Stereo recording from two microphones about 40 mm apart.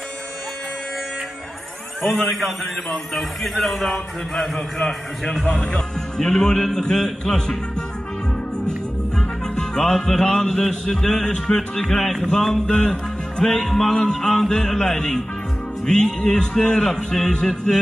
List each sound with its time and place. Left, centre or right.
2.0 s a man's voice: centre
8.6 s music: centre
10.9 s a man's voice: centre
13.9 s a man's voice: left